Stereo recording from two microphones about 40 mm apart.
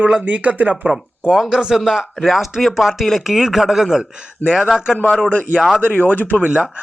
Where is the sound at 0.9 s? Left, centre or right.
Centre.